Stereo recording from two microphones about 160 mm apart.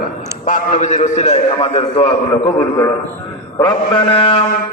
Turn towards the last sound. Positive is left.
turn(degrees=35)  # may be behind; listen again after turning